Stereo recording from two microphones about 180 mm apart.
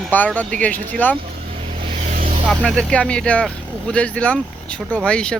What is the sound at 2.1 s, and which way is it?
Vehicle, 50° right (ahead or behind).